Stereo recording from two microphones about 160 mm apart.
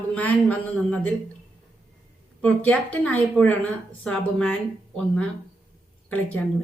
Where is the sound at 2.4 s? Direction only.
10° left (ahead or behind).